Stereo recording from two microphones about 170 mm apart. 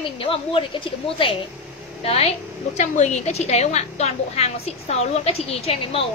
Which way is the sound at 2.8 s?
45° left (ahead or behind).